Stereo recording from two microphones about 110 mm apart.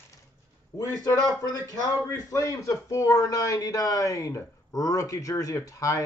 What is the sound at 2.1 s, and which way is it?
A man's voice, 30° left (ahead or behind).